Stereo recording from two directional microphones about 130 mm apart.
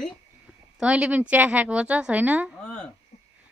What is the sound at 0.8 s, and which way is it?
A woman's voice, 10° right (ahead or behind).